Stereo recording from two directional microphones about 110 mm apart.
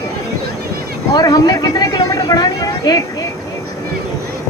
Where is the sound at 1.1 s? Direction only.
35° left (ahead or behind).